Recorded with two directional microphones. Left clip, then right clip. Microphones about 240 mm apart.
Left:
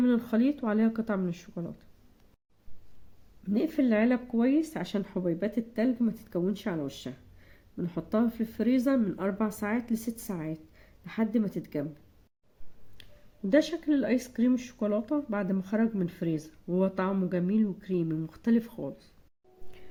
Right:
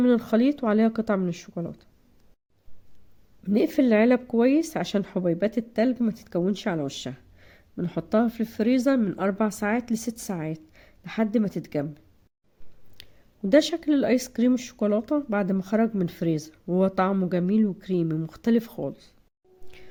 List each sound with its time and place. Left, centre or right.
0.0 s speech: right
3.4 s speech: right
13.0 s speech: right